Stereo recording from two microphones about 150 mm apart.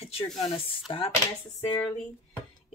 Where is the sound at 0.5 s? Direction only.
35° left (ahead or behind).